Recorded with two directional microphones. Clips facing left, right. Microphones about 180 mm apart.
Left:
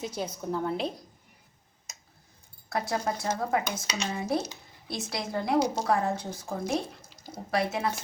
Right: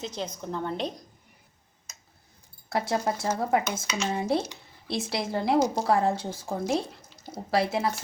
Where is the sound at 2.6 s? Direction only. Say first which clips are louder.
Right 3 dB; 30° right (ahead or behind).